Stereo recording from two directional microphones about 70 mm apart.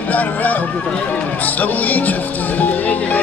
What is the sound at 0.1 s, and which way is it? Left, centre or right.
Speech, left.